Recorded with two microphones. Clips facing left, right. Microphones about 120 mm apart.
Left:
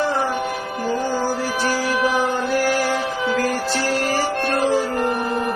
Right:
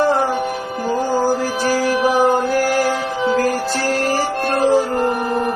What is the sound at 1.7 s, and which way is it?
Music, 40° right (ahead or behind).